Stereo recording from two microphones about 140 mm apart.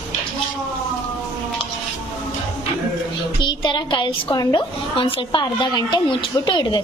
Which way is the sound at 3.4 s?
35° left (ahead or behind).